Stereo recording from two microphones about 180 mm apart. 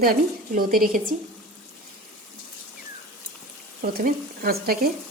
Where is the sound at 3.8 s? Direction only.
55° right (ahead or behind).